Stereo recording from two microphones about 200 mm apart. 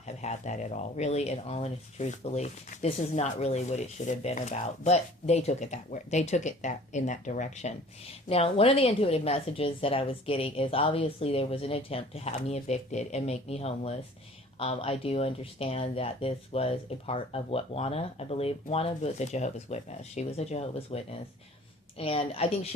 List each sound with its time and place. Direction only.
0.0 s a woman's voice: 35° left (ahead or behind)